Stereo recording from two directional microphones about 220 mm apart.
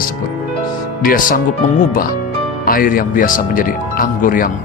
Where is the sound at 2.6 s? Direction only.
40° left (ahead or behind).